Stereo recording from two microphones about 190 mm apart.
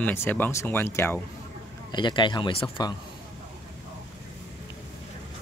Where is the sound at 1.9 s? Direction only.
25° left (ahead or behind).